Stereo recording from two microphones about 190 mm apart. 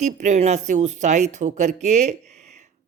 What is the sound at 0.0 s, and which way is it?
A woman's voice, 40° right (ahead or behind).